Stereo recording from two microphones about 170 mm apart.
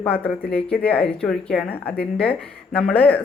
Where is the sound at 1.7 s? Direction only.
65° left (ahead or behind).